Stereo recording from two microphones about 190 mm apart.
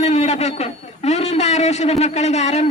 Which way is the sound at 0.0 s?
35° left (ahead or behind).